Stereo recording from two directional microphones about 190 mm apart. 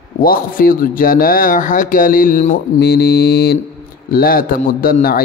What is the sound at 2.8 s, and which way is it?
Mantra, 55° left (ahead or behind).